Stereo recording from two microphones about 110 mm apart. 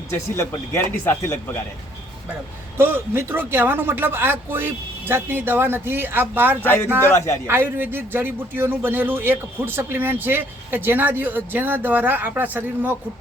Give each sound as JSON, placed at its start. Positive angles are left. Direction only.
{"t": 0.1, "sound": "speech", "side_deg": 25}
{"t": 2.7, "sound": "speech", "side_deg": -20}
{"t": 6.6, "sound": "speech", "side_deg": 20}
{"t": 7.4, "sound": "speech", "side_deg": -20}